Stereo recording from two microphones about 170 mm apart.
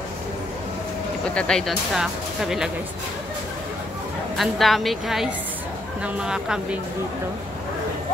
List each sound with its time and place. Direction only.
1.3 s speech: 5° left (ahead or behind)
4.4 s speech: centre (ahead or behind)